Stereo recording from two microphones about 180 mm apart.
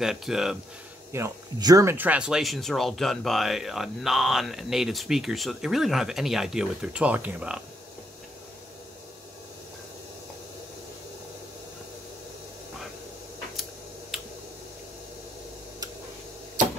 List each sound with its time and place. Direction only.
0.0 s speech: centre (ahead or behind)
1.1 s speech: 20° right (ahead or behind)
14.1 s a sound: centre (ahead or behind)